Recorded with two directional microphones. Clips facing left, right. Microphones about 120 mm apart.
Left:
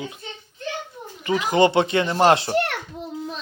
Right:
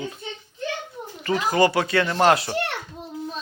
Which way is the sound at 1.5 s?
25° left (ahead or behind).